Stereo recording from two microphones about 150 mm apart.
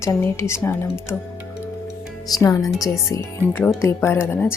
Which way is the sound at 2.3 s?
25° left (ahead or behind).